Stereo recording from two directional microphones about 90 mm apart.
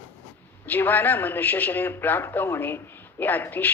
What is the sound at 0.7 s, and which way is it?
A man's voice, 20° left (ahead or behind).